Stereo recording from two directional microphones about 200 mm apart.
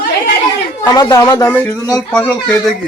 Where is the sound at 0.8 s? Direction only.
20° left (ahead or behind).